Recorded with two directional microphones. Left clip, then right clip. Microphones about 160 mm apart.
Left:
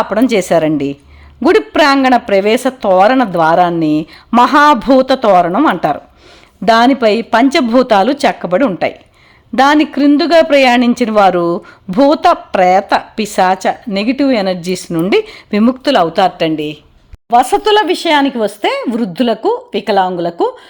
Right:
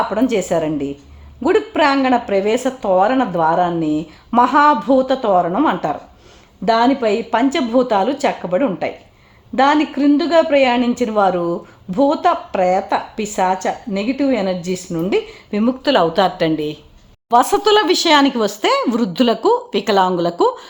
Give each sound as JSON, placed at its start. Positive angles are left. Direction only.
{"t": 0.1, "sound": "a man's voice", "side_deg": 25}
{"t": 15.8, "sound": "a woman's voice", "side_deg": 20}